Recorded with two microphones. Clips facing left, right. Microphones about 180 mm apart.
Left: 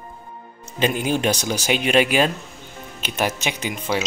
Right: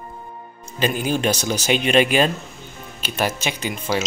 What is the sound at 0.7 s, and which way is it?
Speech, 20° left (ahead or behind).